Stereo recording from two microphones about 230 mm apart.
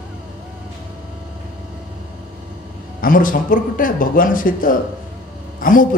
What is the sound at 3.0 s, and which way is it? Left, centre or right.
A man's voice, left.